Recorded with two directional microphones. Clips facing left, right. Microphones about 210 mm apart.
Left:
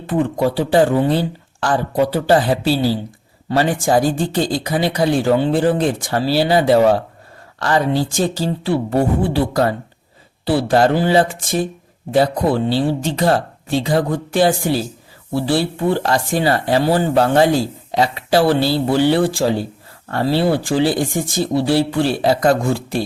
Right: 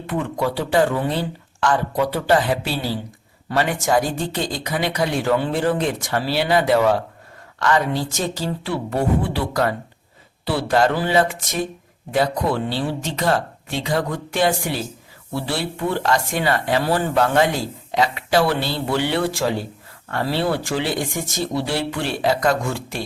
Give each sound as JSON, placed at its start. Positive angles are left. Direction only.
{"t": 0.1, "sound": "speech", "side_deg": 30}